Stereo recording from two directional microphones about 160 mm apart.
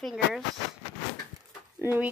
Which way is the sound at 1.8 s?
10° right (ahead or behind).